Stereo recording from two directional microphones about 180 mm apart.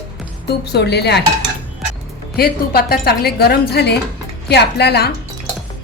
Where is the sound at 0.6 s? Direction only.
65° left (ahead or behind).